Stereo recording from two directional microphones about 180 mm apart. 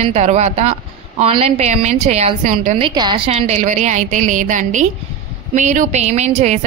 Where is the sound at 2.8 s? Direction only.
25° right (ahead or behind).